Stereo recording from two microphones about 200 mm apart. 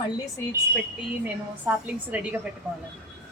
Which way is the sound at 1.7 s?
10° right (ahead or behind).